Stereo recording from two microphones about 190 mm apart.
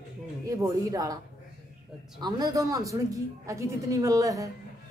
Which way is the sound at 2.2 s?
20° right (ahead or behind).